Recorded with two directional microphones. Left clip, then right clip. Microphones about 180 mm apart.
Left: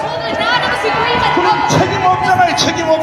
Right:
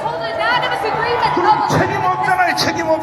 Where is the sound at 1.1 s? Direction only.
20° right (ahead or behind).